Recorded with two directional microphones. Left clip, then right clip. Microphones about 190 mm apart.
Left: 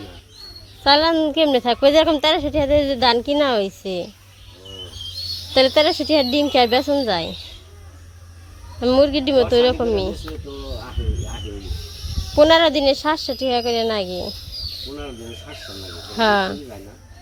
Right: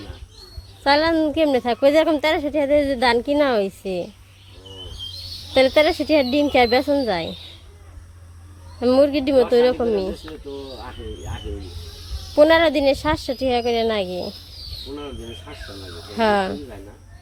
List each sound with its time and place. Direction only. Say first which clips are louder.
0.9 s a woman's voice: left 2 dB; 5° right (ahead or behind)
5.5 s a woman's voice: even; 5° right (ahead or behind)
8.8 s a woman's voice: left 1 dB; 10° right (ahead or behind)
12.3 s a woman's voice: left 1 dB; 5° right (ahead or behind)
16.1 s speech: left 2 dB; 5° right (ahead or behind)